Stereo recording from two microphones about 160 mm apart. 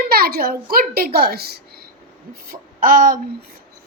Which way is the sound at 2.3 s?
60° right (ahead or behind).